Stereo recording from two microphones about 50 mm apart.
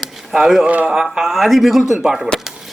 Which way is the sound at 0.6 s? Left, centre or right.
Right.